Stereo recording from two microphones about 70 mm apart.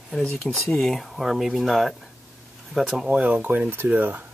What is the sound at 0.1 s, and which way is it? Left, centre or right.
Speech, centre.